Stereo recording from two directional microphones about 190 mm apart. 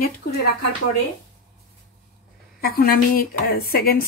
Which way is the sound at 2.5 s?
50° left (ahead or behind).